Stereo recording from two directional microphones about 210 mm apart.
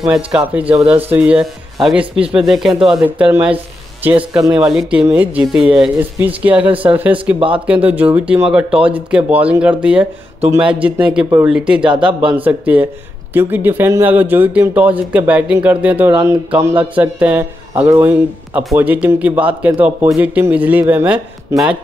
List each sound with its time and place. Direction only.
0.0 s speech: 5° right (ahead or behind)
0.7 s speech: 25° right (ahead or behind)
0.9 s speech: 10° right (ahead or behind)
7.3 s speech: 25° right (ahead or behind)
7.6 s speech: 5° right (ahead or behind)